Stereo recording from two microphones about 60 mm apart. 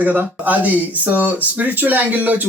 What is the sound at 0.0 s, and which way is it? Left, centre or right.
Speech, right.